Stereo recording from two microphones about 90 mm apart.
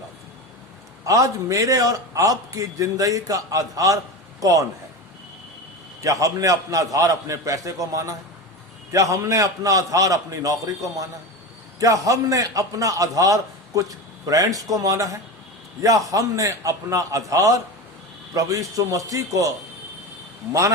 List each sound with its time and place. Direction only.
1.0 s a man's voice: 40° right (ahead or behind)
6.0 s a man's voice: 35° right (ahead or behind)
20.5 s a man's voice: 35° right (ahead or behind)